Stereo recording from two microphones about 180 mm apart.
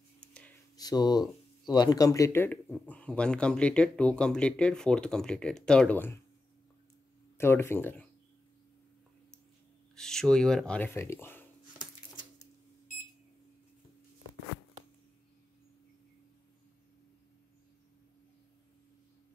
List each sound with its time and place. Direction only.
0.3 s a sound: 5° left (ahead or behind)
0.7 s speech: 20° left (ahead or behind)
7.3 s speech: 15° left (ahead or behind)
9.9 s speech: 5° left (ahead or behind)